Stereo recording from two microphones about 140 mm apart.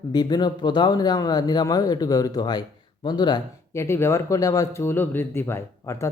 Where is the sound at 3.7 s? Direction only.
20° left (ahead or behind).